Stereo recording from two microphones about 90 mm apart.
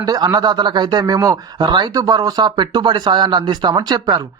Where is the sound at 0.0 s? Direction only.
45° right (ahead or behind).